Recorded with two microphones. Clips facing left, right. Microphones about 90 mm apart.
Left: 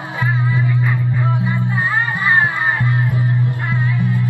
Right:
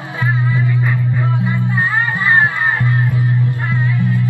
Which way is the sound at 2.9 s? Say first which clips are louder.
Right 1 dB; 20° left (ahead or behind).